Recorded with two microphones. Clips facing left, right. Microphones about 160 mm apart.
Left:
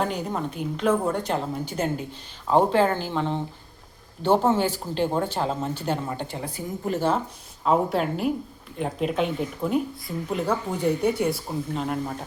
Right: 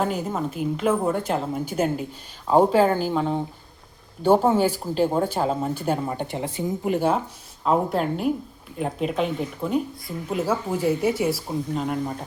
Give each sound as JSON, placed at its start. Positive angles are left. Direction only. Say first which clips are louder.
{"t": 0.0, "sound": "a woman's voice", "louder": "right 2 dB", "side_deg": -5}
{"t": 7.6, "sound": "a woman's voice", "louder": "even", "side_deg": 0}